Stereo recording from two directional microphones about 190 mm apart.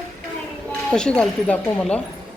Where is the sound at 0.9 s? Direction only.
5° left (ahead or behind).